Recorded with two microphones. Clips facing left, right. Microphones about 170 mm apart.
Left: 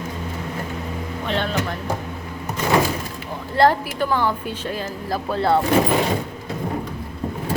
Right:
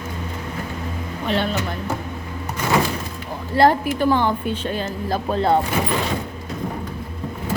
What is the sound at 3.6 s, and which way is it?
A woman's voice, 15° right (ahead or behind).